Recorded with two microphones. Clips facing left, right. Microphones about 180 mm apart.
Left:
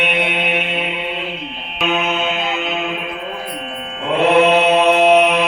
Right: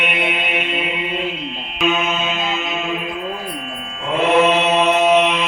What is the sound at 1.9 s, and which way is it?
Music, 60° left (ahead or behind).